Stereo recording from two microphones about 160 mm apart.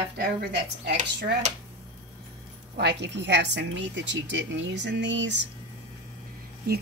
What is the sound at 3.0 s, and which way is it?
A woman's voice, 90° right.